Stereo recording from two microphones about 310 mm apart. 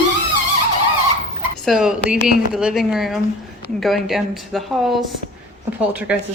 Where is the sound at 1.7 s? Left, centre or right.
Centre.